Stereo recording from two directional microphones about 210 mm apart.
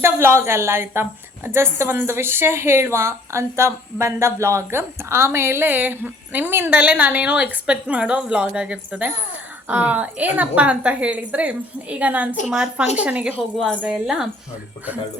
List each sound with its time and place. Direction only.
0.0 s a woman's voice: 10° right (ahead or behind)